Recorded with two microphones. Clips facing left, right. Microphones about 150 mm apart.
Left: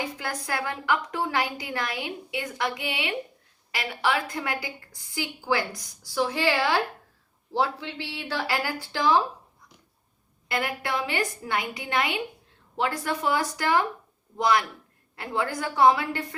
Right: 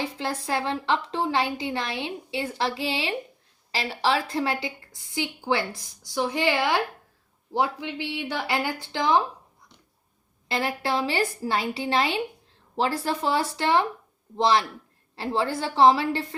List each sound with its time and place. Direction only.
0.0 s a woman's voice: 25° right (ahead or behind)
10.5 s a woman's voice: 30° right (ahead or behind)